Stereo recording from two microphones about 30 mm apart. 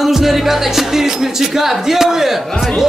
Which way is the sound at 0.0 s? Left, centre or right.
Centre.